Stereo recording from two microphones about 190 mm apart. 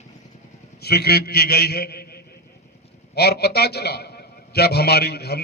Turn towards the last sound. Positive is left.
turn(degrees=55)  # may be behind; listen again after turning